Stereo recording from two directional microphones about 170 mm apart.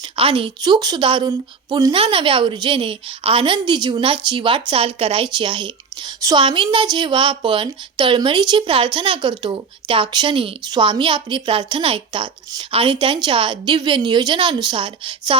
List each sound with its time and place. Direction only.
0.2 s a woman's voice: 30° right (ahead or behind)